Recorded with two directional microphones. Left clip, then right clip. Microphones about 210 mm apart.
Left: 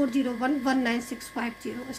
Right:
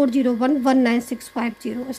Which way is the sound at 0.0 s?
35° right (ahead or behind).